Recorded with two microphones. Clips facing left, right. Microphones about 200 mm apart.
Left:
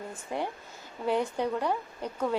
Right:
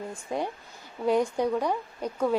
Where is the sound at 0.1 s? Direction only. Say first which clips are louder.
Right 1 dB; 15° right (ahead or behind).